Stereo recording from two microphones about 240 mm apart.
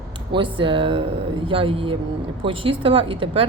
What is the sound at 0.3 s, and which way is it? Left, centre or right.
A woman's voice, right.